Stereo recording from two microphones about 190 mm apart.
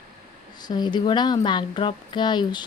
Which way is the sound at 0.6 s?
20° left (ahead or behind).